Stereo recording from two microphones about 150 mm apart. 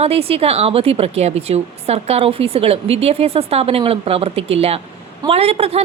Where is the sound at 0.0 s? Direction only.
40° right (ahead or behind).